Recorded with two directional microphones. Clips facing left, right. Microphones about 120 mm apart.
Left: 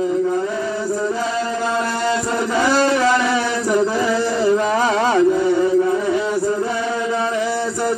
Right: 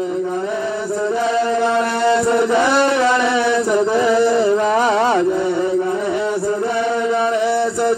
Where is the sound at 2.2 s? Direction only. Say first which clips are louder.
Right 4 dB; 25° right (ahead or behind).